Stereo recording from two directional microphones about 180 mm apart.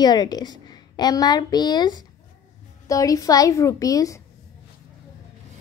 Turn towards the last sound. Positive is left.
turn(degrees=20)  # may be behind; listen again after turning